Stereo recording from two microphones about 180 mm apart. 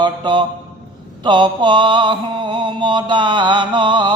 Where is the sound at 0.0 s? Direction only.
25° right (ahead or behind).